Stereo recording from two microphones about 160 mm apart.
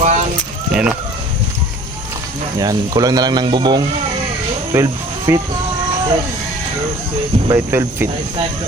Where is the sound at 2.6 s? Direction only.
20° right (ahead or behind).